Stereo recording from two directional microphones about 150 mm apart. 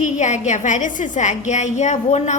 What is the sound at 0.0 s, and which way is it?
A woman's voice, 50° left (ahead or behind).